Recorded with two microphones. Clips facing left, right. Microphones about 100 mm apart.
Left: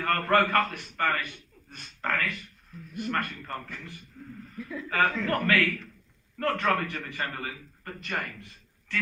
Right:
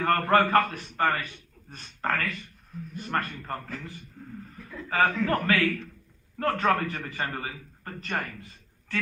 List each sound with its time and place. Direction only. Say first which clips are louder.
0.0 s a man's voice: right 3 dB; 25° right (ahead or behind)
0.3 s a man's voice: right 1 dB; 40° right (ahead or behind)